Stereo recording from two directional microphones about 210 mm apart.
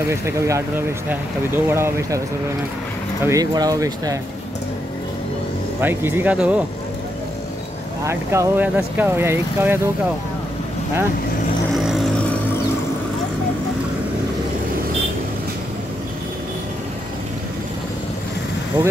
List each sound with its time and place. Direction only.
0.1 s speech: 15° right (ahead or behind)
3.3 s speech: 15° right (ahead or behind)
5.8 s speech: 10° right (ahead or behind)
8.0 s speech: 15° right (ahead or behind)
11.8 s vehicle: centre (ahead or behind)
18.8 s speech: 20° right (ahead or behind)